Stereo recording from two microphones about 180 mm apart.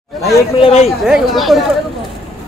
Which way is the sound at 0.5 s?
35° left (ahead or behind).